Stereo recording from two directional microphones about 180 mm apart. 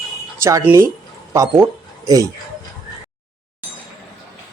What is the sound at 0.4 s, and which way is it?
Speech, 15° right (ahead or behind).